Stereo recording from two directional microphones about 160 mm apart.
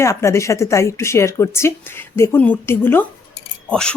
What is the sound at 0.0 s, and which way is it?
Speech, 15° left (ahead or behind).